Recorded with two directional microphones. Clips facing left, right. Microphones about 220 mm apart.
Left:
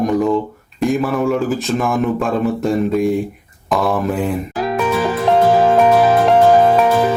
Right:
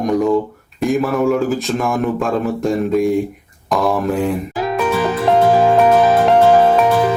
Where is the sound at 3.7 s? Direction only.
Centre (ahead or behind).